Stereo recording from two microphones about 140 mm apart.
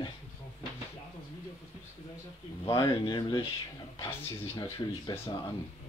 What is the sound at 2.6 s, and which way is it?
Speech, 30° left (ahead or behind).